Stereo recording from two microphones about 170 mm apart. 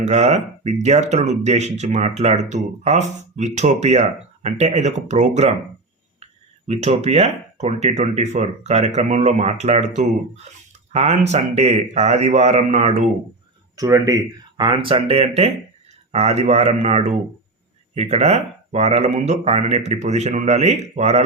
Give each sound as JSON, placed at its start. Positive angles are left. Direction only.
{"t": 0.0, "sound": "speech", "side_deg": -40}
{"t": 6.7, "sound": "speech", "side_deg": -40}
{"t": 13.7, "sound": "speech", "side_deg": -20}